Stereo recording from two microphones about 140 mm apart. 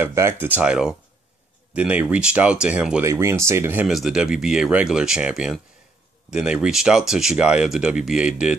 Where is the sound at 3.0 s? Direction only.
20° right (ahead or behind).